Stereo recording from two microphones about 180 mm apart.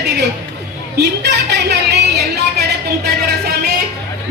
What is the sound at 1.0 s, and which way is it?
Speech, 70° right (ahead or behind).